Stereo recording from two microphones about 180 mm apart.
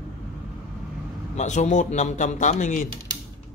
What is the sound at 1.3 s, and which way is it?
Speech, 40° left (ahead or behind).